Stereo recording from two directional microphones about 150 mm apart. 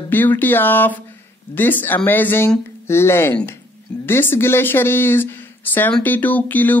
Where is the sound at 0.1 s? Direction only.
10° left (ahead or behind).